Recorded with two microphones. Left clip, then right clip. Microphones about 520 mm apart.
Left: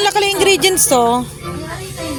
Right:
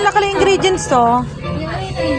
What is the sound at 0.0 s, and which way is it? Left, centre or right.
Music, left.